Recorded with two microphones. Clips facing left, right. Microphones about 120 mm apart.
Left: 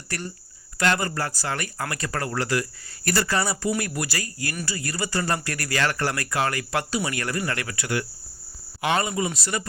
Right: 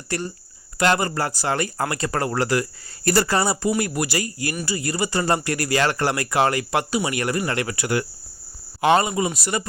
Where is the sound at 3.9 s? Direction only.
20° right (ahead or behind).